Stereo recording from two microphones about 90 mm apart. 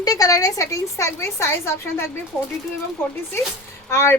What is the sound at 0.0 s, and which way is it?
A woman's voice, 40° left (ahead or behind).